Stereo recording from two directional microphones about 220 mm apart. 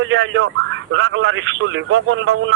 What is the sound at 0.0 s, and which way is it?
Speech, 60° right (ahead or behind).